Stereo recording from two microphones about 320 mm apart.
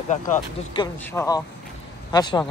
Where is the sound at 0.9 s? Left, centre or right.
Centre.